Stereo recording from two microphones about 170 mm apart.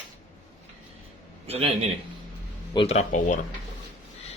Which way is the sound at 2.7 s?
35° left (ahead or behind).